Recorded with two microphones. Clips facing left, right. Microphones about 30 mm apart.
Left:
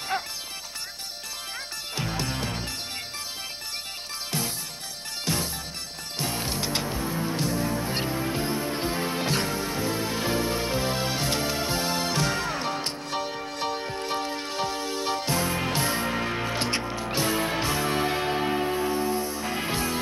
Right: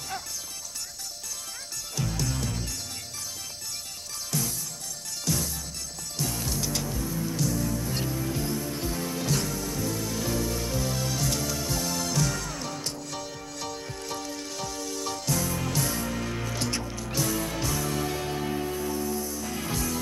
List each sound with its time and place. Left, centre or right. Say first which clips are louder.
0.1 s music: left 7 dB; left
2.0 s music: left 1 dB; left
5.2 s music: left 1 dB; left